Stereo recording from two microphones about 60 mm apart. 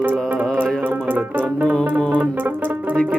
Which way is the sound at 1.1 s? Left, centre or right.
Right.